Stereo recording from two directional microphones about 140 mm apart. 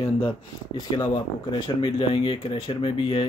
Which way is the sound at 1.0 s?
35° left (ahead or behind).